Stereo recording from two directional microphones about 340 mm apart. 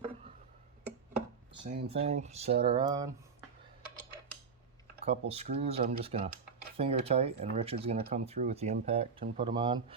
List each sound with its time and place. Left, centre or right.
1.9 s speech: centre
5.0 s speech: centre